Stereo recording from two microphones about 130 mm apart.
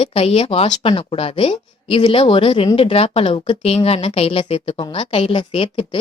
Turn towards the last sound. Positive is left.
turn(degrees=40)  # may be behind; listen again after turning